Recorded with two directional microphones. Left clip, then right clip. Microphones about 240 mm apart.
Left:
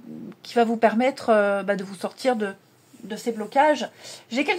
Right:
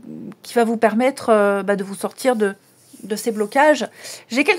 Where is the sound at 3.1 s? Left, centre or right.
Right.